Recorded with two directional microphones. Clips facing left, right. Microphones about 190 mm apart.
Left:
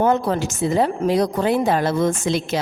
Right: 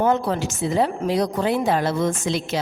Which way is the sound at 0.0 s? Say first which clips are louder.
Left 2 dB; 50° left (ahead or behind).